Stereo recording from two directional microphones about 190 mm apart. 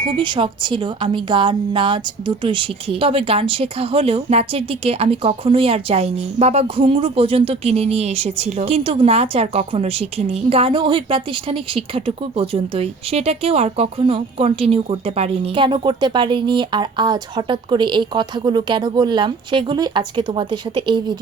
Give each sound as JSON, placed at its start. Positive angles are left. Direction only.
{"t": 0.0, "sound": "a woman's voice", "side_deg": -25}